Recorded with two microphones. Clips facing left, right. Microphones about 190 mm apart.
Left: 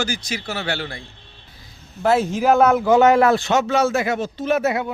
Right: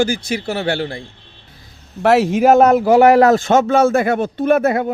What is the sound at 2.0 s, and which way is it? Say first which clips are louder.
Speech: right 5 dB; 75° right (ahead or behind).